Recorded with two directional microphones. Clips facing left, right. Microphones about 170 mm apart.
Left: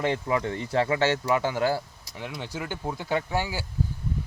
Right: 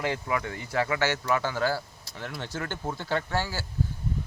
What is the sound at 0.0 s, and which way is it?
Speech, 25° left (ahead or behind).